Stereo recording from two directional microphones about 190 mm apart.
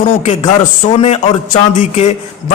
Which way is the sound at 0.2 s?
35° left (ahead or behind).